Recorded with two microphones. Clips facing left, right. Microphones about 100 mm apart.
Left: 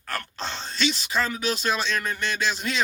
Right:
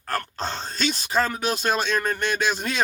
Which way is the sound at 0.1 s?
45° right (ahead or behind).